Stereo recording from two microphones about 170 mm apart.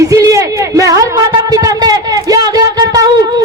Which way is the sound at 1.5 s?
20° right (ahead or behind).